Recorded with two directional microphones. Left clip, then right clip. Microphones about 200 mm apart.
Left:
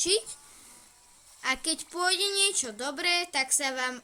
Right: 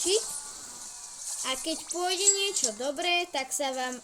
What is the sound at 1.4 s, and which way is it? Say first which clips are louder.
Speech: left 3 dB; 15° left (ahead or behind).